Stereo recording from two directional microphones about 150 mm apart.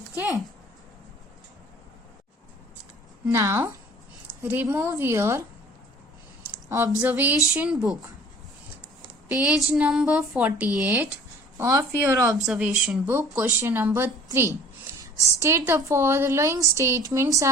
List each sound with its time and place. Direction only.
3.2 s speech: 20° right (ahead or behind)
6.7 s speech: 20° right (ahead or behind)
7.7 s speech: 5° right (ahead or behind)
9.4 s speech: 5° right (ahead or behind)
11.5 s a woman's voice: 25° right (ahead or behind)
12.3 s speech: 10° right (ahead or behind)
13.1 s a woman's voice: 15° right (ahead or behind)